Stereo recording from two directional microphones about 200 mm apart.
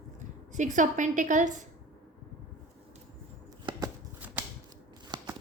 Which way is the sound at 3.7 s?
25° right (ahead or behind).